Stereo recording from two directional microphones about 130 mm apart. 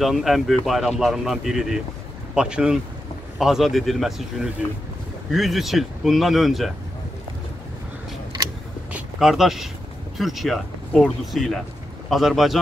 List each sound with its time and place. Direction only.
0.0 s speech: centre (ahead or behind)
8.9 s speech: 5° right (ahead or behind)